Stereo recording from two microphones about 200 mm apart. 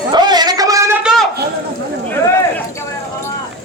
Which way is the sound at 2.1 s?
15° left (ahead or behind).